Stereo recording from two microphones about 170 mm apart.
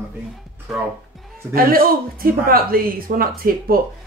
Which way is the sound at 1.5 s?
60° right (ahead or behind).